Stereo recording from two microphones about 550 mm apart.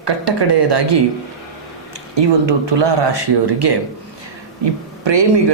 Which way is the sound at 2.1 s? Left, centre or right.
Right.